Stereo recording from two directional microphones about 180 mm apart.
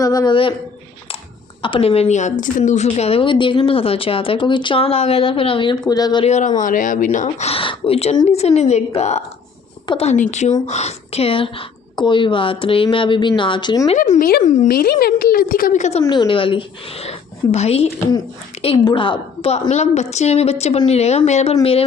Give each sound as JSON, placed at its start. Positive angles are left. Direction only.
{"t": 0.0, "sound": "a woman's voice", "side_deg": 20}
{"t": 1.6, "sound": "a woman's voice", "side_deg": 30}
{"t": 6.2, "sound": "a woman's voice", "side_deg": 40}
{"t": 13.8, "sound": "a woman's voice", "side_deg": 40}
{"t": 14.7, "sound": "a woman's voice", "side_deg": 60}
{"t": 16.0, "sound": "a woman's voice", "side_deg": 25}